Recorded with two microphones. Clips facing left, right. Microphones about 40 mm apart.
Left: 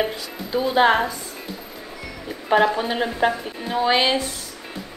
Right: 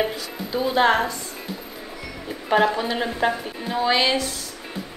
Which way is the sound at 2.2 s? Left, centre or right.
Centre.